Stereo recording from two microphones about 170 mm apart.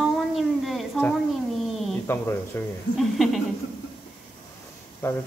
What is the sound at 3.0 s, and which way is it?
Speech, centre (ahead or behind).